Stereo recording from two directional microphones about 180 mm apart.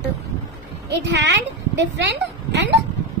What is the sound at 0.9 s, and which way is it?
A woman's voice, 70° right (ahead or behind).